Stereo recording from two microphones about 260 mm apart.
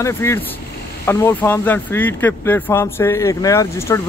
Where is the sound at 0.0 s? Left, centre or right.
Centre.